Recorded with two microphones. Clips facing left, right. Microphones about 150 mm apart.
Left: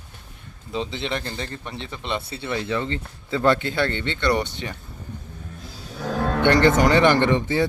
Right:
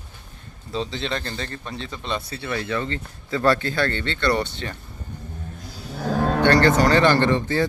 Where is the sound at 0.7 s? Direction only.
15° left (ahead or behind).